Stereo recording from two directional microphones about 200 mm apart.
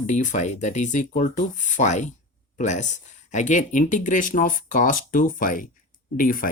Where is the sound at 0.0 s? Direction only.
40° left (ahead or behind).